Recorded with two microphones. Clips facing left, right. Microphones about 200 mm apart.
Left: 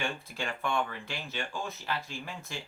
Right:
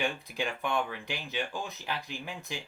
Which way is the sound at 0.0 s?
15° right (ahead or behind).